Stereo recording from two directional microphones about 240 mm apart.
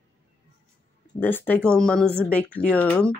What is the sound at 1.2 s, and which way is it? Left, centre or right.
Speech, centre.